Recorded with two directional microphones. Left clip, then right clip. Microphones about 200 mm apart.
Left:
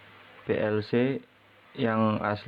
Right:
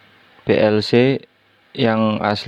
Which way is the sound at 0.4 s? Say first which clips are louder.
Right 12 dB; 50° right (ahead or behind).